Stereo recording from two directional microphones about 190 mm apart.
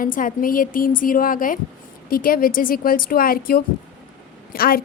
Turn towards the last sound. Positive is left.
turn(degrees=50)  # may be behind; listen again after turning